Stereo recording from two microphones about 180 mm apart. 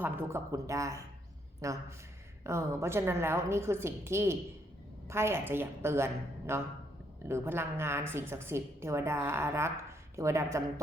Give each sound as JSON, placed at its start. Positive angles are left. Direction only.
{"t": 0.0, "sound": "a woman's voice", "side_deg": -15}